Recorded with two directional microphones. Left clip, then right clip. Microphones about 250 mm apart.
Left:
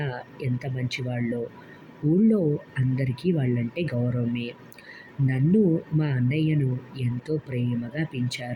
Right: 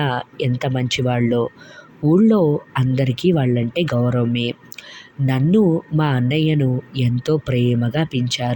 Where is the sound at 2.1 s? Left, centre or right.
Right.